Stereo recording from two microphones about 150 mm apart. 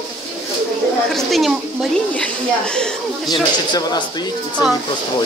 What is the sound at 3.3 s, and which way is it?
Speech, 25° left (ahead or behind).